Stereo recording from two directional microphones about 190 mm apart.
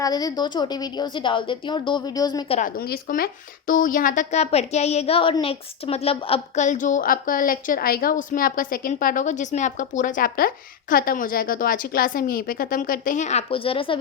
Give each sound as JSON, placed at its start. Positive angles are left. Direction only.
{"t": 0.0, "sound": "a woman's voice", "side_deg": 20}
{"t": 2.6, "sound": "speech", "side_deg": 50}